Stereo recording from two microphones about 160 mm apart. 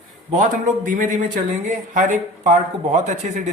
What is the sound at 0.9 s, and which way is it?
Speech, 55° right (ahead or behind).